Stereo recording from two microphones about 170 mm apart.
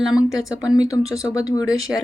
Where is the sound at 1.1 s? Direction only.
20° left (ahead or behind).